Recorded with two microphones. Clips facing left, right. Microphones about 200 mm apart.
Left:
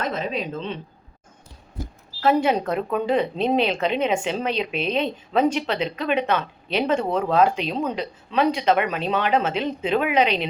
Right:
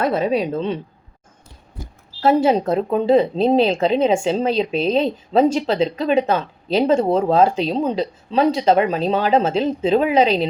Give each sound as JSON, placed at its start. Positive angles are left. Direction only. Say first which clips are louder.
{"t": 0.1, "sound": "a woman's voice", "louder": "right 8 dB", "side_deg": -35}
{"t": 2.2, "sound": "a woman's voice", "louder": "right 4 dB", "side_deg": -30}